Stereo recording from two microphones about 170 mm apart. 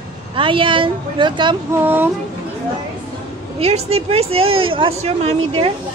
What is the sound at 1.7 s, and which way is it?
Speech, 10° right (ahead or behind).